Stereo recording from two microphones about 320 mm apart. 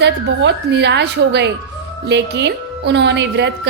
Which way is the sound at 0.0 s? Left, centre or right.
Right.